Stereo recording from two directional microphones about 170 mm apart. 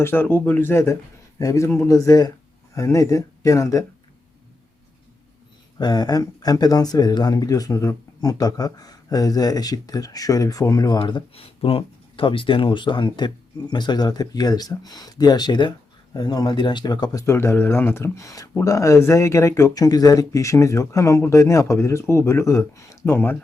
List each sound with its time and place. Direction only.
0.0 s speech: 10° left (ahead or behind)
5.8 s speech: 25° left (ahead or behind)